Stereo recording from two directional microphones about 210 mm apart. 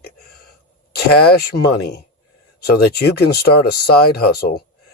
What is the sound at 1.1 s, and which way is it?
Speech, 50° left (ahead or behind).